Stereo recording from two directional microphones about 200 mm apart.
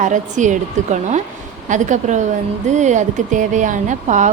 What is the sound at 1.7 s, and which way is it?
A woman's voice, 40° right (ahead or behind).